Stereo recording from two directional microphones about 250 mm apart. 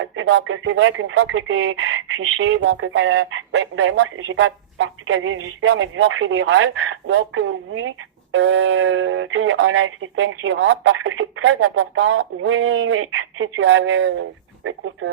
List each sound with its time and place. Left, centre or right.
0.0 s speech: right